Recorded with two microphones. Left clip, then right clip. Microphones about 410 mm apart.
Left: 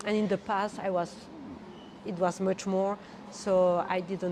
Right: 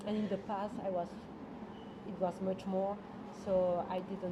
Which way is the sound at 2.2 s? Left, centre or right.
Left.